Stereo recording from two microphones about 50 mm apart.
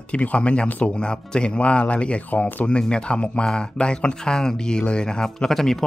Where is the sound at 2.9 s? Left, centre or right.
Left.